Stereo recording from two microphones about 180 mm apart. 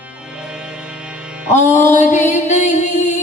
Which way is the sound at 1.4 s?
40° left (ahead or behind).